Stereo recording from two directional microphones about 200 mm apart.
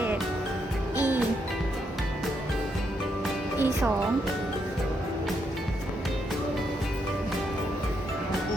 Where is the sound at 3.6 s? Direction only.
5° right (ahead or behind).